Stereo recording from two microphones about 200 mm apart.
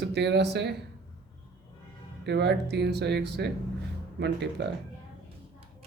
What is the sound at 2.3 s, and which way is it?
Speech, 55° right (ahead or behind).